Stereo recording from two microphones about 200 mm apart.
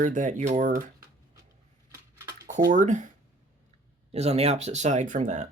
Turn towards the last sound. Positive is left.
turn(degrees=-35)  # may be behind; listen again after turning